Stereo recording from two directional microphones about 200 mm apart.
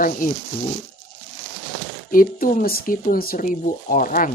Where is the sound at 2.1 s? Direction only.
45° left (ahead or behind).